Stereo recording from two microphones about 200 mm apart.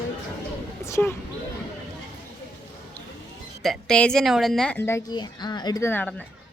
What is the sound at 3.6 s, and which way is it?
Speech, centre (ahead or behind).